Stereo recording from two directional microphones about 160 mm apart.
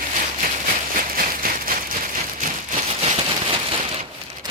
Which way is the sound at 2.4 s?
55° right (ahead or behind).